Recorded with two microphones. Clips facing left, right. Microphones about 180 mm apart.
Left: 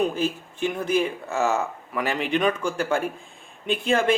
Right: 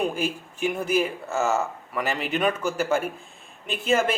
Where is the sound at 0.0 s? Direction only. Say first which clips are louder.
Left 2 dB; 10° right (ahead or behind).